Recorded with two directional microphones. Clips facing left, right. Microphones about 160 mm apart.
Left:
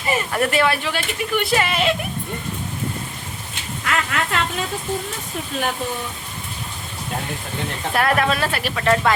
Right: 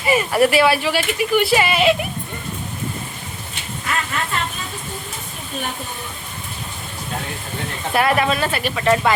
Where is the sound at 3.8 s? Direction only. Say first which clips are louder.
Left 2 dB; 70° left (ahead or behind).